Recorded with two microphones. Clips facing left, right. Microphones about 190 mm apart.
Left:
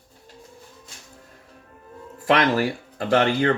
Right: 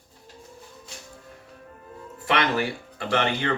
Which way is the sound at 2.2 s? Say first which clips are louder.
Left 5 dB; 40° left (ahead or behind).